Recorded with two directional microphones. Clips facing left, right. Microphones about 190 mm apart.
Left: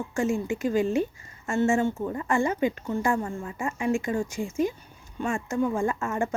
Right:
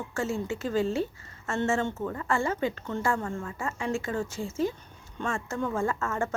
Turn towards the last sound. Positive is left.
turn(degrees=15)  # may be behind; listen again after turning